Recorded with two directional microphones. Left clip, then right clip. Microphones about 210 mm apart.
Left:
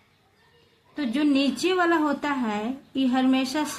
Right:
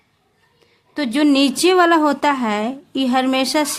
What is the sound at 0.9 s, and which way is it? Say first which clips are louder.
A woman's voice: right 8 dB; 50° right (ahead or behind).